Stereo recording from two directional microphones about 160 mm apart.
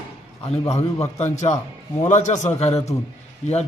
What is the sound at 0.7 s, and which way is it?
A man's voice, 40° left (ahead or behind).